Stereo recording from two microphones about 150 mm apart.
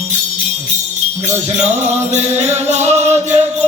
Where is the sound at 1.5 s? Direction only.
45° right (ahead or behind).